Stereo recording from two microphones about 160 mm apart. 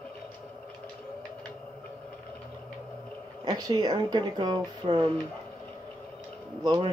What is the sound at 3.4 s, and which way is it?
Speech, 25° right (ahead or behind).